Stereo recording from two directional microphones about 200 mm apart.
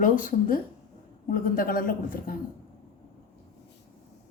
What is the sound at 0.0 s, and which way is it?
A man's voice, 40° left (ahead or behind).